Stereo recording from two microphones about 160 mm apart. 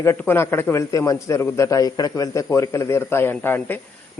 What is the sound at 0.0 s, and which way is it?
A man's voice, 15° left (ahead or behind).